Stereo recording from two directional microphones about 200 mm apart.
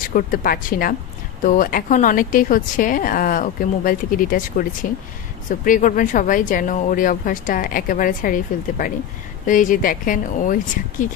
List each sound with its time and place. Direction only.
0.1 s speech: 45° left (ahead or behind)